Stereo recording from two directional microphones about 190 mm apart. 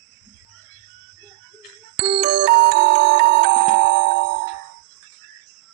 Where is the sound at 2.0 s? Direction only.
60° right (ahead or behind).